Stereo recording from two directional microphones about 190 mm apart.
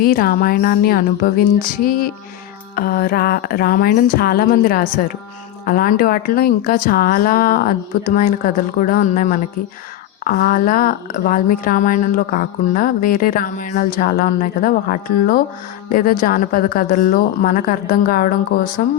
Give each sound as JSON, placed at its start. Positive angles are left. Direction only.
{"t": 0.0, "sound": "speech", "side_deg": 50}